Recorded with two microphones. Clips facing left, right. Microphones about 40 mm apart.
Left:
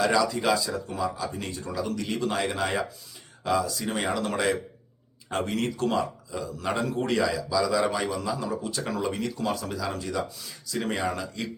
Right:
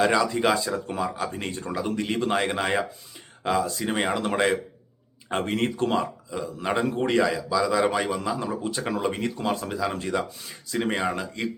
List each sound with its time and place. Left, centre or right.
0.0 s a man's voice: right